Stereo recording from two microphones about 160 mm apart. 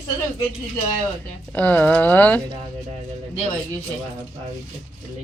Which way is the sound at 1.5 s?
10° left (ahead or behind).